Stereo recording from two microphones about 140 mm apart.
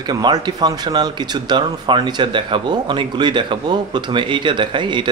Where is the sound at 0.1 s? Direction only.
30° right (ahead or behind).